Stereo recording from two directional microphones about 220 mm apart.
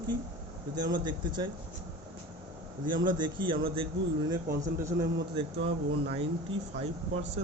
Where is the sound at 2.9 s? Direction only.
20° right (ahead or behind).